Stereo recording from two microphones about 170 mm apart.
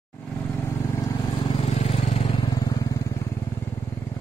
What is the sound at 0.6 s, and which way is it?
Vehicle, 20° left (ahead or behind).